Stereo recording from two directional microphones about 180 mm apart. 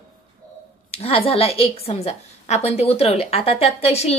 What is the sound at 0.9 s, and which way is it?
A woman's voice, 30° left (ahead or behind).